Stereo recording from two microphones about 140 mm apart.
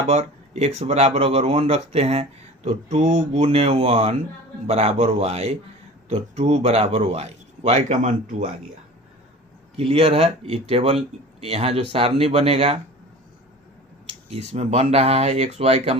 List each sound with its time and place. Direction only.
0.1 s speech: 55° right (ahead or behind)
9.7 s speech: 45° right (ahead or behind)
14.1 s speech: 45° right (ahead or behind)